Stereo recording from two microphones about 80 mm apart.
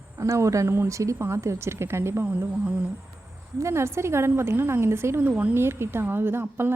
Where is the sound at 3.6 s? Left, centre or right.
Right.